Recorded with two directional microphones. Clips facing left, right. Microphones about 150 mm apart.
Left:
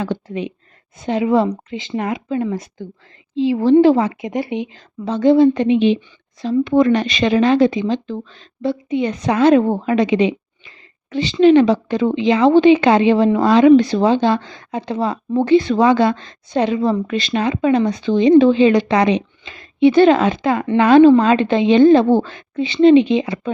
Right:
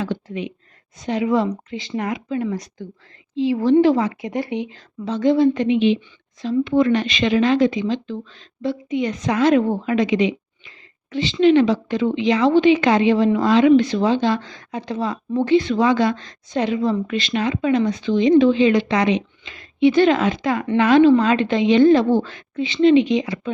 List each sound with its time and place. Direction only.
1.0 s speech: 30° left (ahead or behind)
5.0 s speech: 30° left (ahead or behind)